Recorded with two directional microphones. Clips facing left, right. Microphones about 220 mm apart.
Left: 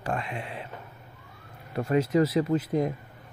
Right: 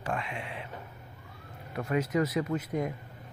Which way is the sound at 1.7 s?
30° left (ahead or behind).